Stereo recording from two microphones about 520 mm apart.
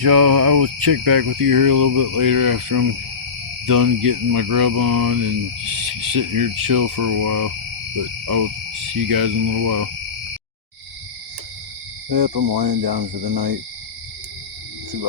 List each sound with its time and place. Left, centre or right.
0.0 s cricket: right
8.9 s cricket: right
12.0 s cricket: right